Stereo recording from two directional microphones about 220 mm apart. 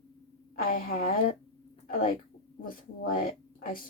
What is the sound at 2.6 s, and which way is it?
A woman's voice, 40° left (ahead or behind).